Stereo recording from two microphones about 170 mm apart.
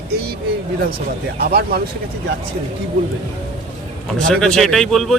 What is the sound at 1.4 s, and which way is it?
Speech, 65° right (ahead or behind).